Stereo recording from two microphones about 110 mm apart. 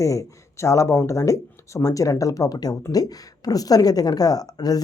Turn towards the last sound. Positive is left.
turn(degrees=35)  # may be behind; listen again after turning